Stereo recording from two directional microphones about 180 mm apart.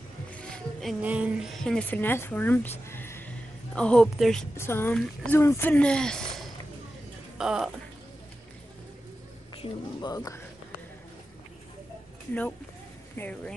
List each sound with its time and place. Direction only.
0.3 s a woman's voice: 5° left (ahead or behind)
9.6 s speech: 20° left (ahead or behind)
13.1 s speech: 10° left (ahead or behind)